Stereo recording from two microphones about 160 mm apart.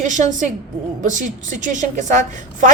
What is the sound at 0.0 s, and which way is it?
A woman's voice, 50° right (ahead or behind).